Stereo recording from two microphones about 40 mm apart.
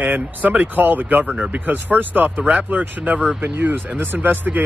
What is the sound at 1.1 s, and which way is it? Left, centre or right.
Speech, right.